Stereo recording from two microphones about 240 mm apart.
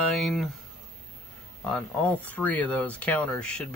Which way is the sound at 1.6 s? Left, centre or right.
Centre.